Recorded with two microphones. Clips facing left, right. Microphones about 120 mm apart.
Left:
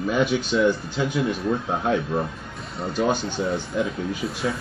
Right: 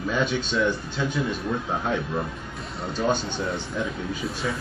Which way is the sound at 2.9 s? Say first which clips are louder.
Left 2 dB; 10° left (ahead or behind).